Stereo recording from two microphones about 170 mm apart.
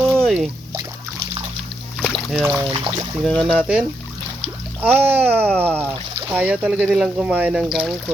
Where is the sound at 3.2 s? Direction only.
Centre (ahead or behind).